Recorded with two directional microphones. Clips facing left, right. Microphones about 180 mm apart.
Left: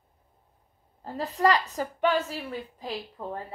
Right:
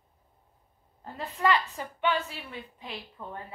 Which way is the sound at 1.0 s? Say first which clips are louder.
Left 4 dB; 35° left (ahead or behind).